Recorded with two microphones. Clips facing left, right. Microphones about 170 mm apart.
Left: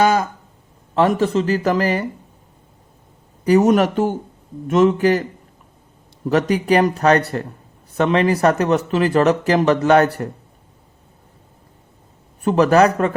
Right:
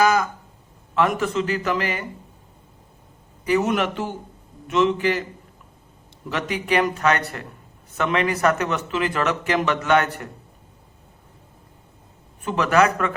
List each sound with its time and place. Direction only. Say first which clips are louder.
0.0 s a sound: left 3 dB; 30° left (ahead or behind)
0.9 s speech: left 5 dB; 30° left (ahead or behind)
3.4 s a man's voice: left 7 dB; 40° left (ahead or behind)
6.2 s speech: left 9 dB; 40° left (ahead or behind)
12.4 s speech: left 6 dB; 35° left (ahead or behind)